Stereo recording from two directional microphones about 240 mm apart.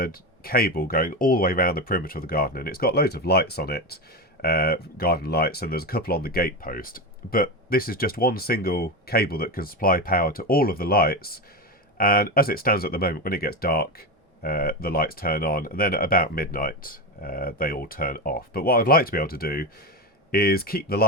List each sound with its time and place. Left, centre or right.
0.0 s speech: left